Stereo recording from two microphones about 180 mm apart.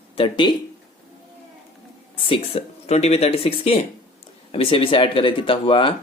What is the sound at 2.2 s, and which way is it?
Speech, 35° left (ahead or behind).